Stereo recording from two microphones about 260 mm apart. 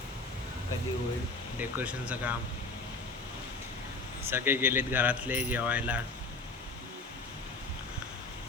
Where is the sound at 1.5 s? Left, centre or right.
Centre.